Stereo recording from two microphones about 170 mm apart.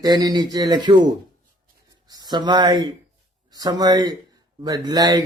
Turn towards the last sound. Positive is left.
turn(degrees=-20)  # may be behind; listen again after turning